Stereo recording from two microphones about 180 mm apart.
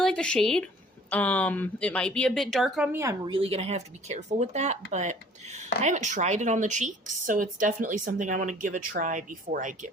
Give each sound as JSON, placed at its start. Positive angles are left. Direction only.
{"t": 0.0, "sound": "speech", "side_deg": 5}
{"t": 2.9, "sound": "a woman's voice", "side_deg": -15}